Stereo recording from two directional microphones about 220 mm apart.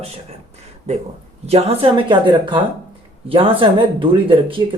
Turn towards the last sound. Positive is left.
turn(degrees=-25)  # may be behind; listen again after turning